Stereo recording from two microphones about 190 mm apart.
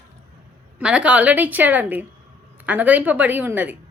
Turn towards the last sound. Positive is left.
turn(degrees=-10)  # may be behind; listen again after turning